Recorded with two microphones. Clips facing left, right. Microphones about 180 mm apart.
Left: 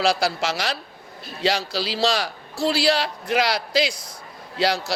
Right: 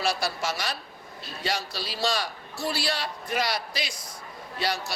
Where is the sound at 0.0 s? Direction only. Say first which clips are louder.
Left 6 dB; 85° left.